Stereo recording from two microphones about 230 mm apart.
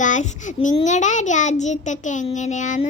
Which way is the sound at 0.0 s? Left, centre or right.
Left.